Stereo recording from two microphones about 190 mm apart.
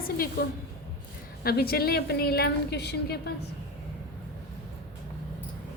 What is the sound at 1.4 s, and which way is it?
A woman's voice, 55° left (ahead or behind).